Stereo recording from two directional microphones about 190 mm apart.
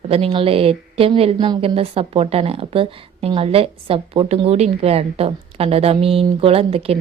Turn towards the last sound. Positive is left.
turn(degrees=-30)  # may be behind; listen again after turning